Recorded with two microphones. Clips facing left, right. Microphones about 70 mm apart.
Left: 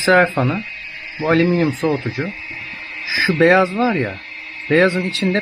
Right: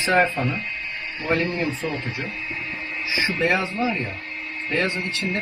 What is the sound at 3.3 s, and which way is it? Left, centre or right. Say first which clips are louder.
Speech: left 12 dB; left.